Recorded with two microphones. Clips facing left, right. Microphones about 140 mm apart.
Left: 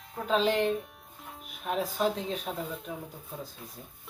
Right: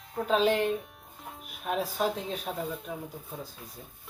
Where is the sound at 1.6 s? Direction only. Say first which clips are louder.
Even; 5° right (ahead or behind).